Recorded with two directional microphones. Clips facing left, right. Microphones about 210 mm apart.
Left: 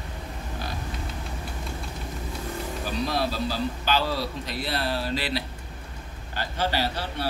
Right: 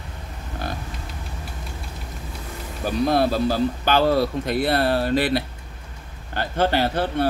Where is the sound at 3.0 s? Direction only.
55° right (ahead or behind).